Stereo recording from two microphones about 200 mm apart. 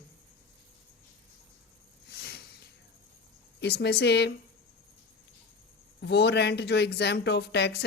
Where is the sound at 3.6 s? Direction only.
55° left (ahead or behind).